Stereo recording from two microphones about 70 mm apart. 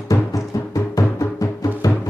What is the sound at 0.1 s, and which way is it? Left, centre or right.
Music, left.